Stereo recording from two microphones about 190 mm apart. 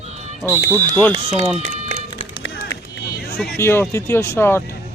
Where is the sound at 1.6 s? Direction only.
70° left (ahead or behind).